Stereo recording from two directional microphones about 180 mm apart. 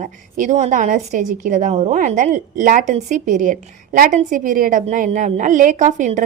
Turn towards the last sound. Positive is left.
turn(degrees=-45)  # may be behind; listen again after turning